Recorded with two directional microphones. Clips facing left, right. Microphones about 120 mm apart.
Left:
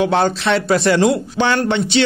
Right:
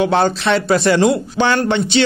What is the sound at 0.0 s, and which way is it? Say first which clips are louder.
A man's voice: right 1 dB; 30° right (ahead or behind).